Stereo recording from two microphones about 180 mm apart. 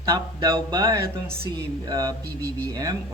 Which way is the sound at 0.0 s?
20° right (ahead or behind).